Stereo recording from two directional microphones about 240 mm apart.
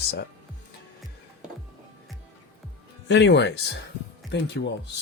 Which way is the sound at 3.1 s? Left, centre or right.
Left.